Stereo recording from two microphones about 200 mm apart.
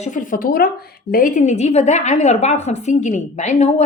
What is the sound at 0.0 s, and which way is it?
A woman's voice, 40° left (ahead or behind).